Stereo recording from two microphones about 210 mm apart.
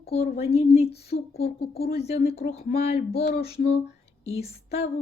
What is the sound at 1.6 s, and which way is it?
Speech, 50° left (ahead or behind).